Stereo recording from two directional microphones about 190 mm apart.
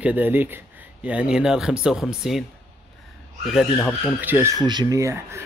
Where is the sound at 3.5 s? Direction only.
5° left (ahead or behind).